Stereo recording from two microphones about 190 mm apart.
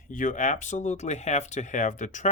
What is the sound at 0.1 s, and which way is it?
Speech, 45° left (ahead or behind).